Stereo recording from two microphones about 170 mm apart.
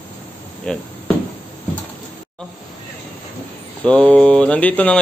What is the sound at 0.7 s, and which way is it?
Speech, 5° left (ahead or behind).